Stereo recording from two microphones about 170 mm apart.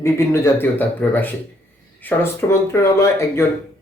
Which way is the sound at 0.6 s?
10° left (ahead or behind).